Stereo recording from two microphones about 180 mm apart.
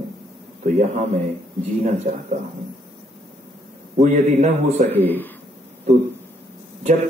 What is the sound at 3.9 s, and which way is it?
Speech, 40° right (ahead or behind).